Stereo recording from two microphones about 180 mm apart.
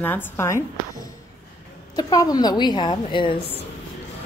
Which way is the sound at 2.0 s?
20° left (ahead or behind).